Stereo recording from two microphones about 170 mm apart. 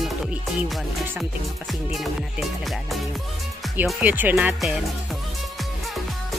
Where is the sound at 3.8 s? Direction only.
10° right (ahead or behind).